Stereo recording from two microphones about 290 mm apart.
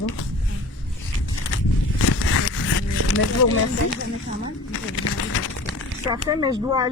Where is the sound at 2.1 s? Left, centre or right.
Left.